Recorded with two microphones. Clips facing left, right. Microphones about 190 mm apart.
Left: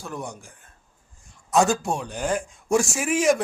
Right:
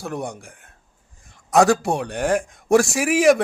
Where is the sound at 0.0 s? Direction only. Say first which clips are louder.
Right 5 dB; 65° right (ahead or behind).